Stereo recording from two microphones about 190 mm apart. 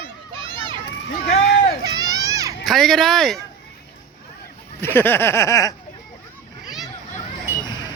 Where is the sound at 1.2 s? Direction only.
55° left (ahead or behind).